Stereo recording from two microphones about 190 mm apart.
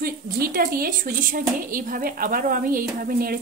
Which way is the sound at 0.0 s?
50° right (ahead or behind).